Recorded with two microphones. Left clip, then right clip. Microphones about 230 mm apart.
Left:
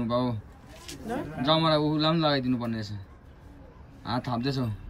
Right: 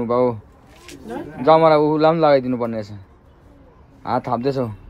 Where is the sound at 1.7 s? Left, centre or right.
Left.